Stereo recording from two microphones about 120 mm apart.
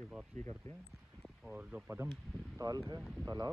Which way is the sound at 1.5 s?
15° right (ahead or behind).